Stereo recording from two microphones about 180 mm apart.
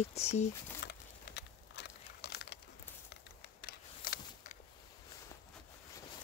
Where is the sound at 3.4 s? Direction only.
55° left (ahead or behind).